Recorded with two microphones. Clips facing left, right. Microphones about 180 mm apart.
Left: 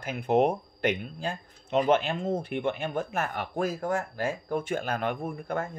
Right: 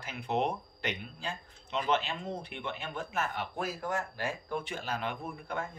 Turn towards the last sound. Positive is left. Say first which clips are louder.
# left 6 dB
turn(degrees=50)  # may be behind; listen again after turning